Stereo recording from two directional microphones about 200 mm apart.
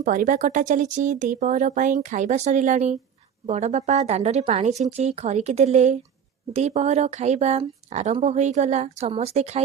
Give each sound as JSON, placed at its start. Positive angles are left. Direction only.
{"t": 0.0, "sound": "speech", "side_deg": -40}